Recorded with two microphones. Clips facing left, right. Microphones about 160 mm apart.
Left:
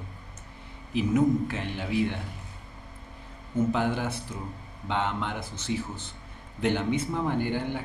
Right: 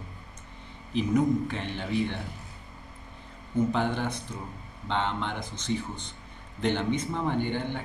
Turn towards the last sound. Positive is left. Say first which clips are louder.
# left 1 dB
turn(degrees=5)  # may be behind; listen again after turning